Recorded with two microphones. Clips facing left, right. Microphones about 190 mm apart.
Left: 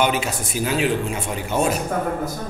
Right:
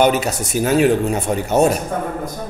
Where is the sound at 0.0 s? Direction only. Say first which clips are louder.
Right 5 dB; 40° right (ahead or behind).